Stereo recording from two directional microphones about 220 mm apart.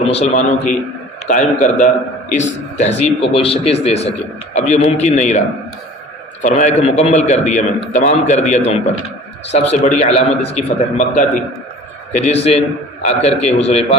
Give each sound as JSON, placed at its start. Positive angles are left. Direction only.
{"t": 0.0, "sound": "a man's voice", "side_deg": 25}
{"t": 6.4, "sound": "a man's voice", "side_deg": 30}